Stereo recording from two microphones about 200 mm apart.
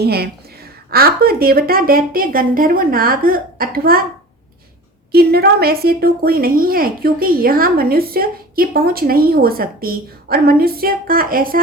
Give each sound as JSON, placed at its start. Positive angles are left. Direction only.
{"t": 0.0, "sound": "a woman's voice", "side_deg": -50}
{"t": 5.1, "sound": "a woman's voice", "side_deg": -50}